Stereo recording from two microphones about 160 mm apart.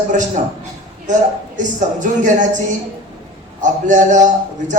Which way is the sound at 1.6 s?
50° right (ahead or behind).